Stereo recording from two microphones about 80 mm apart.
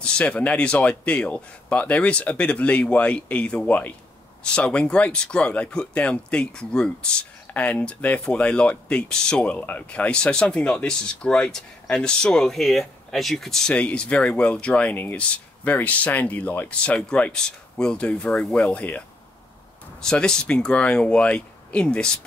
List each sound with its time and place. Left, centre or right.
0.0 s speech: centre